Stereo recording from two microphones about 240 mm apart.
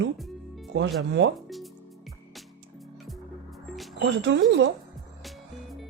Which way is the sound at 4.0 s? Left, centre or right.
Right.